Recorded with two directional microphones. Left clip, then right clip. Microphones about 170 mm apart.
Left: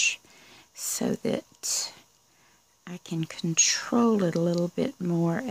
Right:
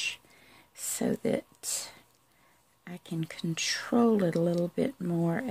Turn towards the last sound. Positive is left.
turn(degrees=20)  # may be behind; listen again after turning